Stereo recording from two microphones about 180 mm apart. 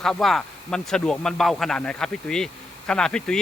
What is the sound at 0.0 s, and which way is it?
Speech, centre (ahead or behind).